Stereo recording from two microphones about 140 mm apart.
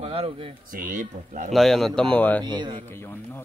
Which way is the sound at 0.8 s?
75° right (ahead or behind).